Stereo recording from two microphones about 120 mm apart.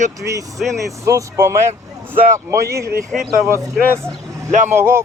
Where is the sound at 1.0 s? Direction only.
25° right (ahead or behind).